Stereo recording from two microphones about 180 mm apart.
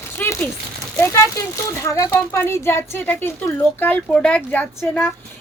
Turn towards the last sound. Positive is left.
turn(degrees=10)  # may be behind; listen again after turning